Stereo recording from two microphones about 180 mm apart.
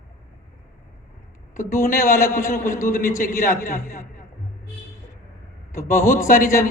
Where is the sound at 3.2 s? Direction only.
50° left (ahead or behind).